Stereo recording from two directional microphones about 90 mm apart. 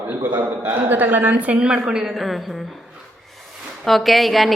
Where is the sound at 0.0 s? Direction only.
20° right (ahead or behind); by 2.6 s centre (ahead or behind).